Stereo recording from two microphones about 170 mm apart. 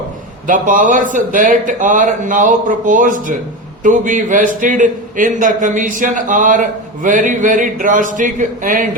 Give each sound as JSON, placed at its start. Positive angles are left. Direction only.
{"t": 0.4, "sound": "a man's voice", "side_deg": -50}